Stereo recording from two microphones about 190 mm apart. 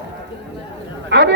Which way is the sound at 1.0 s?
70° right (ahead or behind).